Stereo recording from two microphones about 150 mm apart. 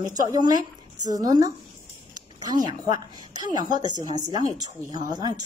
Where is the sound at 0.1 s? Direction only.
25° right (ahead or behind).